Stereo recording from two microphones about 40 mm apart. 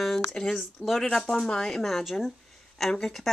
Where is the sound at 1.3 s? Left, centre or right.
Centre.